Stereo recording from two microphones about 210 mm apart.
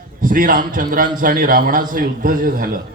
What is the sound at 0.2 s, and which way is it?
A man's voice, 40° right (ahead or behind).